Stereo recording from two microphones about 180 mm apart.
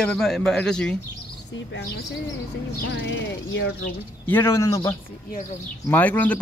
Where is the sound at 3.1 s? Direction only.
80° left.